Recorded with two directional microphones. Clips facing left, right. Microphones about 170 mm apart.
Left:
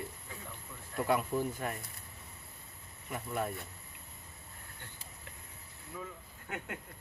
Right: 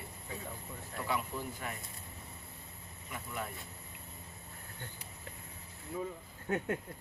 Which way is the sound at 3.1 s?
45° left (ahead or behind).